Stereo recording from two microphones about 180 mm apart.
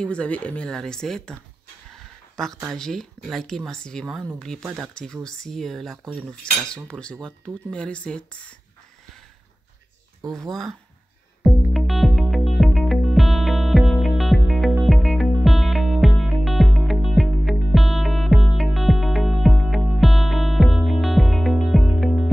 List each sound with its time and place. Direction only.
0.0 s speech: 5° left (ahead or behind)
1.9 s a sound: centre (ahead or behind)
2.6 s speech: 5° left (ahead or behind)
11.4 s music: centre (ahead or behind)